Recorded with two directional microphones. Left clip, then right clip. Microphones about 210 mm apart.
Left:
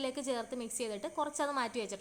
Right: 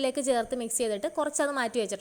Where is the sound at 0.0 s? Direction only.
20° right (ahead or behind).